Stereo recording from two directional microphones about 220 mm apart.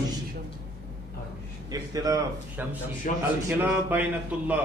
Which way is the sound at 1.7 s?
15° right (ahead or behind).